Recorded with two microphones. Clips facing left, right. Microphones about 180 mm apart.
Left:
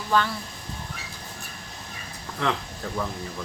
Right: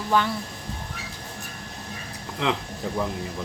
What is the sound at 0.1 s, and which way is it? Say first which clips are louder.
Speech: right 1 dB; 15° right (ahead or behind).